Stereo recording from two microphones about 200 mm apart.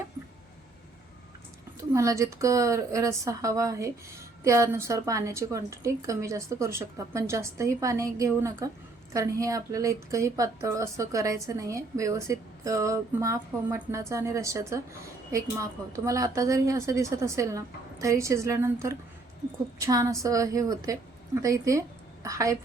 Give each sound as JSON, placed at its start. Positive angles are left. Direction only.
{"t": 1.9, "sound": "speech", "side_deg": -15}